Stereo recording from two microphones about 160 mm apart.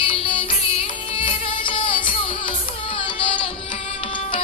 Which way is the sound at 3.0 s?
35° left (ahead or behind).